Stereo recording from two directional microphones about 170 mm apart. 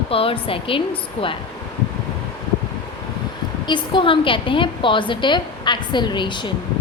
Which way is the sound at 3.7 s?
30° left (ahead or behind).